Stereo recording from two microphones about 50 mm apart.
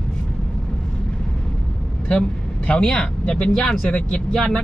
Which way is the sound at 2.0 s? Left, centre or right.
Left.